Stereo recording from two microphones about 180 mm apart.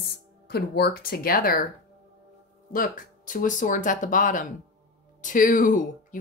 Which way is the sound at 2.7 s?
50° left (ahead or behind).